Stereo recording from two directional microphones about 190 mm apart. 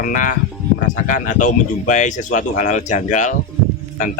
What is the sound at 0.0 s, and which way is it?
Speech, 45° left (ahead or behind).